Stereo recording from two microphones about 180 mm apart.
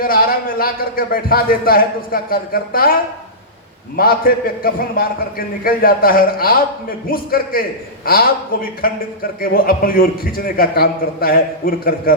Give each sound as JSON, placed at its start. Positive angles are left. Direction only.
{"t": 0.0, "sound": "a man's voice", "side_deg": 55}